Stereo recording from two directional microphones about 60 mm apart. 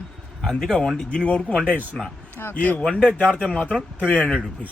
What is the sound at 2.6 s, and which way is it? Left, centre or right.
Speech, left.